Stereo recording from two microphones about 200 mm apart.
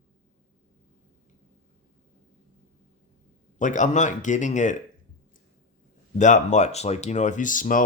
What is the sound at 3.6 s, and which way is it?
Speech, 40° left (ahead or behind).